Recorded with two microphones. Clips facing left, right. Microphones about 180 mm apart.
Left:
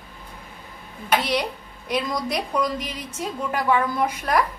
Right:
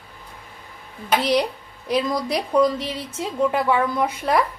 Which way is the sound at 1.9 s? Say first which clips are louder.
Right 3 dB; 30° right (ahead or behind).